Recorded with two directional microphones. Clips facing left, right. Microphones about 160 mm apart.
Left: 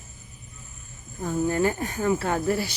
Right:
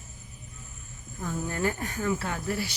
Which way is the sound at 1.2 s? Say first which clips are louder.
Left 6 dB; 25° left (ahead or behind).